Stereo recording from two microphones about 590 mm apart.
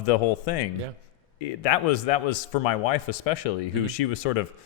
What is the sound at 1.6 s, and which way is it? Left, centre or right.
Speech, left.